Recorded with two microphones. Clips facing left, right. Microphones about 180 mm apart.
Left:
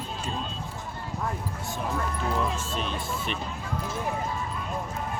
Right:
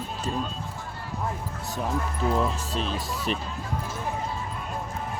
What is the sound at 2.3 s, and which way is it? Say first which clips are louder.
Music: right 2 dB; 35° right (ahead or behind).